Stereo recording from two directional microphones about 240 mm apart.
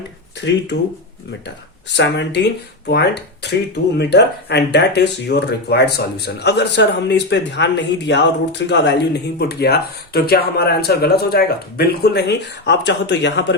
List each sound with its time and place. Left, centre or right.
2.0 s speech: left